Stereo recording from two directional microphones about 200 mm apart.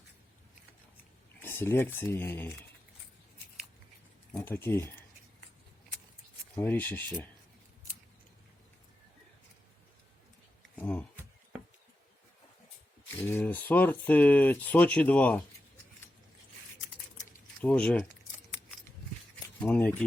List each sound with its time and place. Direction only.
1.4 s speech: 10° left (ahead or behind)
4.3 s speech: 5° left (ahead or behind)
6.6 s speech: 10° left (ahead or behind)
10.8 s a sound: 5° left (ahead or behind)
13.2 s speech: 10° left (ahead or behind)
17.6 s speech: 5° left (ahead or behind)
19.5 s speech: 5° left (ahead or behind)